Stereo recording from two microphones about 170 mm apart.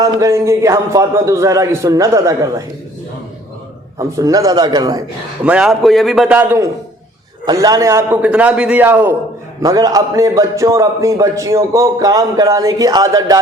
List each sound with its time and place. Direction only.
0.0 s a man's voice: 20° right (ahead or behind)
3.9 s a man's voice: 20° right (ahead or behind)
5.5 s a man's voice: 5° right (ahead or behind)
7.4 s a man's voice: 20° right (ahead or behind)